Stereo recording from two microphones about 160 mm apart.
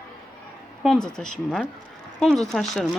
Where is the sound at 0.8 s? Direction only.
5° left (ahead or behind).